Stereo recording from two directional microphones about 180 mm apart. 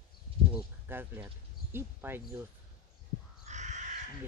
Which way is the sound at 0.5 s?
10° right (ahead or behind).